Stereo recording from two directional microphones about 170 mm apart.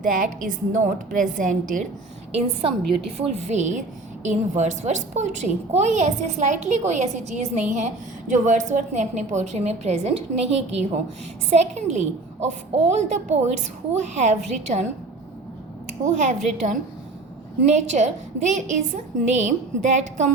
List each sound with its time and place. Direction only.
0.0 s a woman's voice: 50° right (ahead or behind)
2.9 s a woman's voice: 35° right (ahead or behind)
15.9 s a woman's voice: 45° right (ahead or behind)